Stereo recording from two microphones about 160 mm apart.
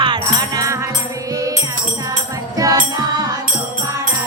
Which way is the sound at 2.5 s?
20° right (ahead or behind).